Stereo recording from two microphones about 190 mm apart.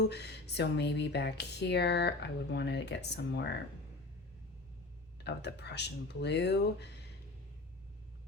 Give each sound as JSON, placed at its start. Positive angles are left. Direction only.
{"t": 0.0, "sound": "speech", "side_deg": 60}
{"t": 5.2, "sound": "speech", "side_deg": 65}